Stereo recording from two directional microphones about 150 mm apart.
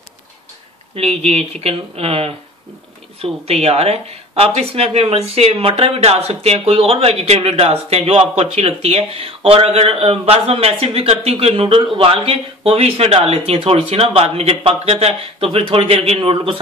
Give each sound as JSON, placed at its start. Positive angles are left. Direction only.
{"t": 0.9, "sound": "speech", "side_deg": -45}